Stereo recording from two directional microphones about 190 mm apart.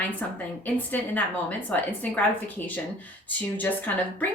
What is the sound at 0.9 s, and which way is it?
A woman's voice, 10° left (ahead or behind).